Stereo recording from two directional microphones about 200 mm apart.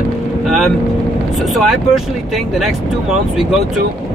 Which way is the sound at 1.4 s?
Centre (ahead or behind).